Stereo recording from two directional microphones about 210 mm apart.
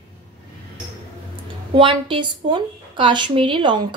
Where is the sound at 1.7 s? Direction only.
25° right (ahead or behind).